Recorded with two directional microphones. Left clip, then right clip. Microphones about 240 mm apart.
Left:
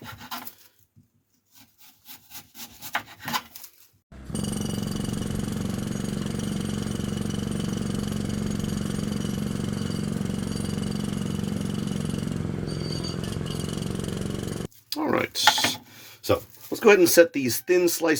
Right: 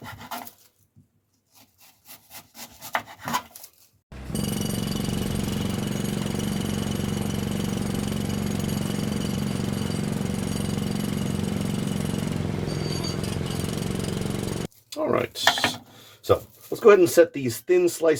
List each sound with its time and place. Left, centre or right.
4.3 s jackhammer: centre
15.0 s a sound: left
16.8 s speech: left